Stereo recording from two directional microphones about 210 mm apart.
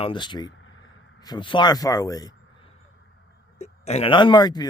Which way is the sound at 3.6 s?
30° left (ahead or behind).